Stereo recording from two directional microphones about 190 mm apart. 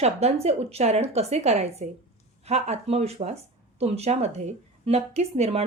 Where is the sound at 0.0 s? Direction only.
35° right (ahead or behind).